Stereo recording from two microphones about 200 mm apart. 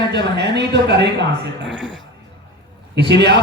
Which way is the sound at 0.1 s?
60° right (ahead or behind).